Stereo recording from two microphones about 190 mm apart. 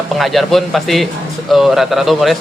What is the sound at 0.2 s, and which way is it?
Speech, centre (ahead or behind).